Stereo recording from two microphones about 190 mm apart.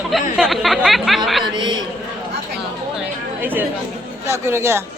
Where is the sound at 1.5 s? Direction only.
25° right (ahead or behind).